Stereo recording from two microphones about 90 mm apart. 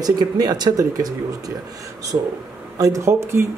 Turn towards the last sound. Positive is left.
turn(degrees=-30)  # may be behind; listen again after turning